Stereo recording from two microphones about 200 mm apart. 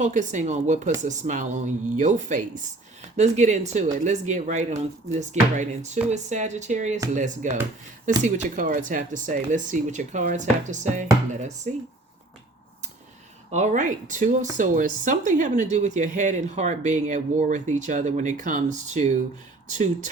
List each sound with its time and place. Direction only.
0.0 s speech: 35° right (ahead or behind)
13.5 s speech: 35° right (ahead or behind)